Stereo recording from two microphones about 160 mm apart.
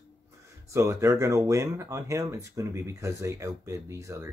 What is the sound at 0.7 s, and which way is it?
Speech, 20° right (ahead or behind).